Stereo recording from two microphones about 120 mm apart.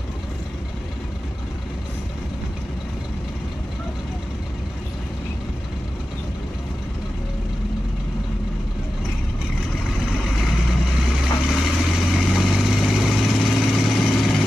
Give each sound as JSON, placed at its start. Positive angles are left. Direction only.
{"t": 10.1, "sound": "vehicle", "side_deg": 0}